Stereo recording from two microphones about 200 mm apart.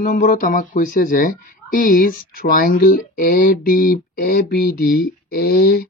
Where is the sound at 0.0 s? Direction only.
45° left (ahead or behind).